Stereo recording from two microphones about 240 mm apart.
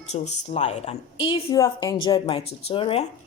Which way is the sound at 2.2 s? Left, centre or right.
Left.